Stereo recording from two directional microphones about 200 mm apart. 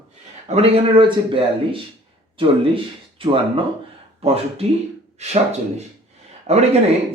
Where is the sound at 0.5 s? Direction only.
30° right (ahead or behind).